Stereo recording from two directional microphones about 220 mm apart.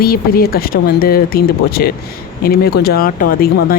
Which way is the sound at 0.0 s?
40° left (ahead or behind).